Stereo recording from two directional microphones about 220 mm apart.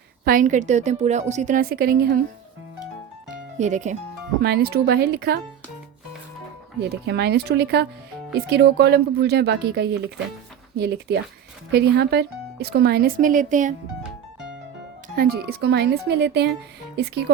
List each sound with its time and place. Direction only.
0.3 s a woman's voice: 35° right (ahead or behind)
3.6 s a woman's voice: 35° right (ahead or behind)
4.4 s speech: 45° right (ahead or behind)
6.9 s speech: 50° right (ahead or behind)
15.1 s speech: 45° right (ahead or behind)